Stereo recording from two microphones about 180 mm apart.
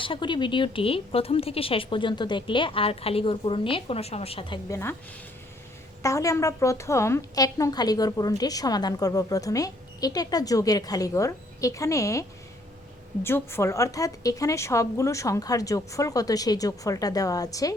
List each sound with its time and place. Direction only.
0.0 s a woman's voice: 25° left (ahead or behind)
6.0 s a woman's voice: 15° left (ahead or behind)
13.2 s a woman's voice: 15° left (ahead or behind)